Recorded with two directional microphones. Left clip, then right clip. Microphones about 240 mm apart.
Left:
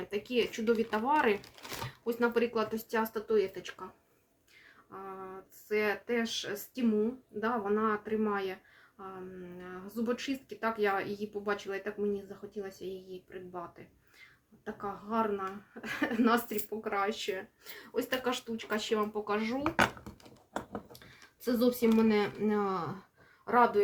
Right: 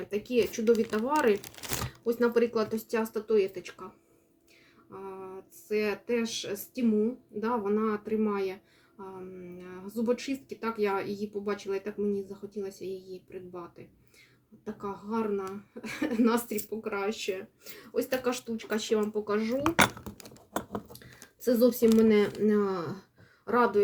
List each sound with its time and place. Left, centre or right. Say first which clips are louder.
0.1 s speech: right 4 dB; centre
4.9 s speech: right 2 dB; centre
9.6 s speech: right 3 dB; centre
14.6 s speech: right 1 dB; centre
19.6 s dishes: right 4 dB; right
21.4 s speech: right 5 dB; centre